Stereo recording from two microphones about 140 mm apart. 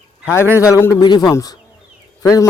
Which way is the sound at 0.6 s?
20° left (ahead or behind).